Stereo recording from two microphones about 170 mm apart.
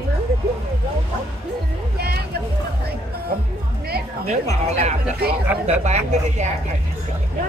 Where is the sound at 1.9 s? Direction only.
65° right (ahead or behind).